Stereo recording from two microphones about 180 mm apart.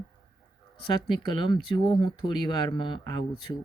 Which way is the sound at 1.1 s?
25° left (ahead or behind).